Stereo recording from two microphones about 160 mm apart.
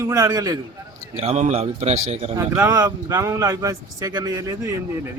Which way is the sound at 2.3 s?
20° right (ahead or behind).